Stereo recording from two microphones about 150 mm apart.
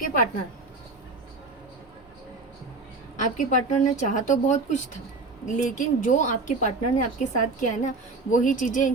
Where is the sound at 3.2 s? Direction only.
55° left (ahead or behind).